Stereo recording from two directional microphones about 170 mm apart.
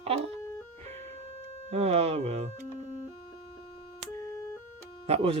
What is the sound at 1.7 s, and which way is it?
Speech, 35° right (ahead or behind).